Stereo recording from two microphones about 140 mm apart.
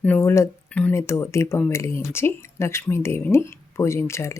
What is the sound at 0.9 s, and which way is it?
Speech, 20° left (ahead or behind).